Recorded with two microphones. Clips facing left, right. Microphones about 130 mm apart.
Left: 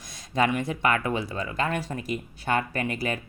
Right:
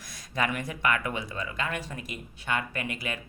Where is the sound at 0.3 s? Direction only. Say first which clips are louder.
Left 6 dB; 25° left (ahead or behind).